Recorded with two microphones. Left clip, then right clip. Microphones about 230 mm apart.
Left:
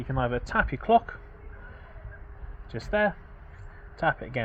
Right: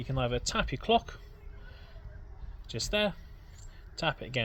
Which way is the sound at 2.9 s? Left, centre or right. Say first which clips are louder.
Left 6 dB; right.